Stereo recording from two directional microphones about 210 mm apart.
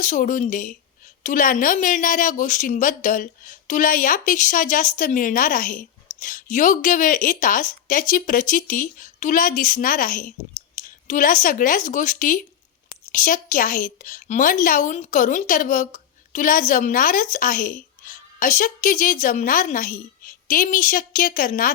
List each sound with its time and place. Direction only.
0.0 s a woman's voice: 35° left (ahead or behind)